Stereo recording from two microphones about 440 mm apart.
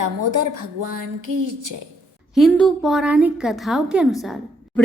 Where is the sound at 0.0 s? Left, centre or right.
Right.